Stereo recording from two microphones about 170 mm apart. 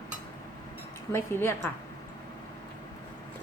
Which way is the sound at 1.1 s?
15° left (ahead or behind).